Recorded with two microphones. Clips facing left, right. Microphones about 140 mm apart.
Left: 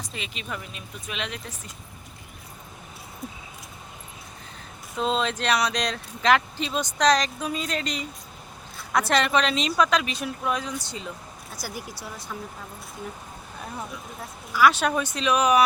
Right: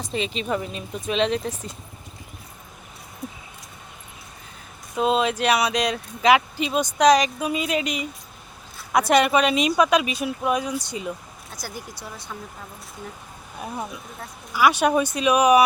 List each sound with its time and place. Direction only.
0.0 s speech: 30° right (ahead or behind)
4.9 s a woman's voice: 10° right (ahead or behind)
11.5 s speech: 5° left (ahead or behind)
14.5 s a woman's voice: 10° right (ahead or behind)